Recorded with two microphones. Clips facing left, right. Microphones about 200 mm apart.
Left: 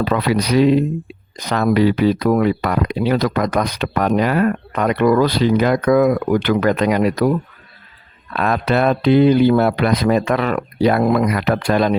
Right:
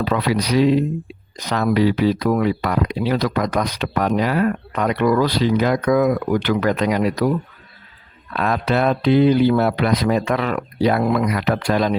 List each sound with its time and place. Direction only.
0.0 s speech: 55° left (ahead or behind)
8.4 s speech: 60° left (ahead or behind)